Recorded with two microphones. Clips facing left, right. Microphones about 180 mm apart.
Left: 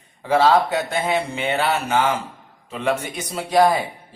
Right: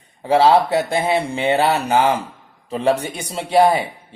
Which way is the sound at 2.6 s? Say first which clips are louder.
Right 5 dB; 35° right (ahead or behind).